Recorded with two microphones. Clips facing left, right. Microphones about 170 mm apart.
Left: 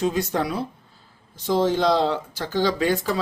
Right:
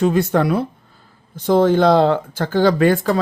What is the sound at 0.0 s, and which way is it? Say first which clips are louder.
Speech: right 7 dB; 60° right (ahead or behind).